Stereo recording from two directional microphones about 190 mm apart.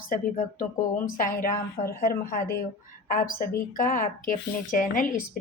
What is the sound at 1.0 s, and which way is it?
A woman's voice, 45° left (ahead or behind).